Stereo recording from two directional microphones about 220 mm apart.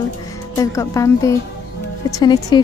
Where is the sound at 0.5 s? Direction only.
15° left (ahead or behind).